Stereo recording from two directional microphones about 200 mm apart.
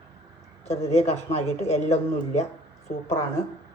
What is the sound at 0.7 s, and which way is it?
Speech, 35° left (ahead or behind).